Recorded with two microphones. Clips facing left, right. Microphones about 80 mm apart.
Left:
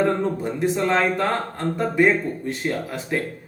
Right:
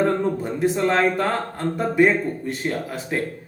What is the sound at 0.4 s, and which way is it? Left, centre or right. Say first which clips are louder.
Music: right 1 dB; centre.